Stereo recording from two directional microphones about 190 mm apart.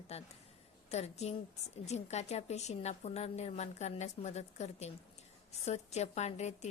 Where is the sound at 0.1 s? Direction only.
35° left (ahead or behind).